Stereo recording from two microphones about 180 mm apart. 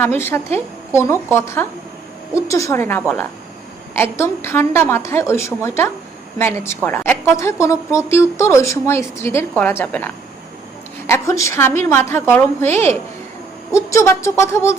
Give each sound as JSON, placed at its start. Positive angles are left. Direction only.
{"t": 0.0, "sound": "a woman's voice", "side_deg": 15}